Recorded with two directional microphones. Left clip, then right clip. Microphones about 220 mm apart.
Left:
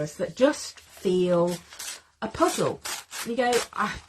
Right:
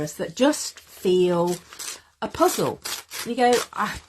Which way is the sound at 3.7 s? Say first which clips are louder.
Right 2 dB; 40° right (ahead or behind).